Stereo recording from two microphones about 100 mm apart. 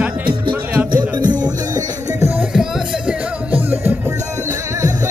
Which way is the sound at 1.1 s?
45° right (ahead or behind).